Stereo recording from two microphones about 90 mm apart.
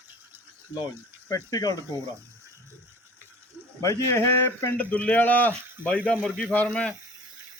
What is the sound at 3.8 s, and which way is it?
Speech, 35° left (ahead or behind).